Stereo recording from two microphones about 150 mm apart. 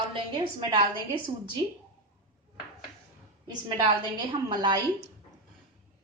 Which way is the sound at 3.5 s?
30° right (ahead or behind).